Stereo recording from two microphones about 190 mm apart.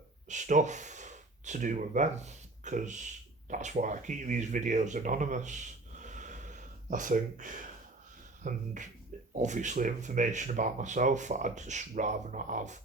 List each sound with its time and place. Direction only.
0.3 s speech: 40° right (ahead or behind)